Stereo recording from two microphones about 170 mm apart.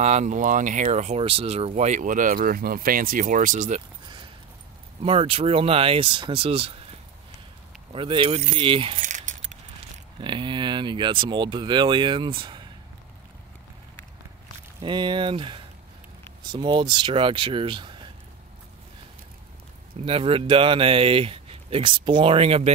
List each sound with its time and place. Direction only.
0.0 s speech: 45° right (ahead or behind)
1.7 s speech: 45° right (ahead or behind)
5.0 s speech: 35° right (ahead or behind)
7.9 s speech: 30° right (ahead or behind)
9.0 s keys jangling: 45° right (ahead or behind)
10.2 s speech: 30° right (ahead or behind)
14.8 s speech: 30° right (ahead or behind)
20.0 s speech: 35° right (ahead or behind)